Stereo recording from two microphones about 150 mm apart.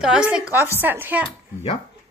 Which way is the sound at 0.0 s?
5° right (ahead or behind).